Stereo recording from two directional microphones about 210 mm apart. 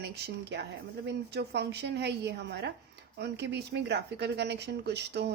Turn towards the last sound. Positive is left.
turn(degrees=-55)  # may be behind; listen again after turning